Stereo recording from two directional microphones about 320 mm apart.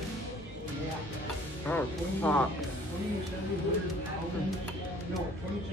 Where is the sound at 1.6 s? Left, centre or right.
Centre.